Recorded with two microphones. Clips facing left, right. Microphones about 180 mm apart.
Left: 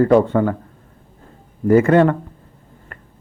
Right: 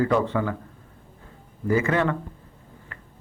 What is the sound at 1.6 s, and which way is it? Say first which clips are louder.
Speech: left 10 dB; 55° left (ahead or behind).